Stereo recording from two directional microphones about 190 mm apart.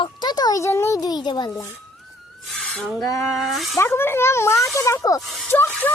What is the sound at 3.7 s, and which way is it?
Speech, 10° left (ahead or behind).